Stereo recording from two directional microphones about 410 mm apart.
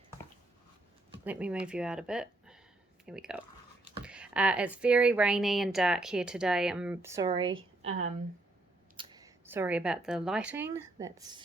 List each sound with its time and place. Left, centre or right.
1.2 s a woman's voice: centre